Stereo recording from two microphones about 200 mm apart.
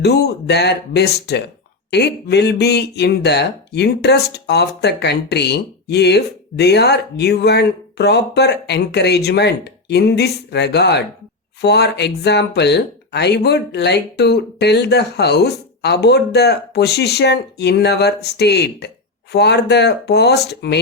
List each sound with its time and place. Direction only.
0.0 s speech: 55° left (ahead or behind)